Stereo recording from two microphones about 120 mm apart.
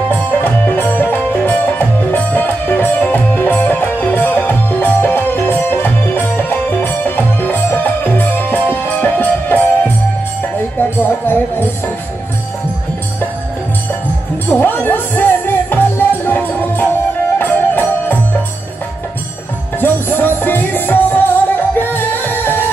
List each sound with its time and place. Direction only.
0.1 s music: 15° left (ahead or behind)
14.5 s music: 15° left (ahead or behind)
19.8 s music: 15° left (ahead or behind)